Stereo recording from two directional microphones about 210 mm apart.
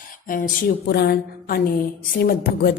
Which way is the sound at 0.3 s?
40° left (ahead or behind).